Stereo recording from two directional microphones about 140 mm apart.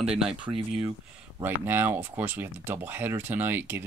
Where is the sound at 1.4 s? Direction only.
15° right (ahead or behind).